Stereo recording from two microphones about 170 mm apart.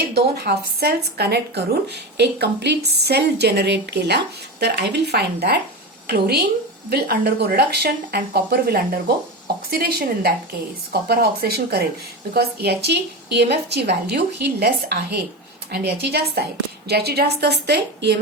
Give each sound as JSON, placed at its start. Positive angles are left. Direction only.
{"t": 0.0, "sound": "a woman's voice", "side_deg": -70}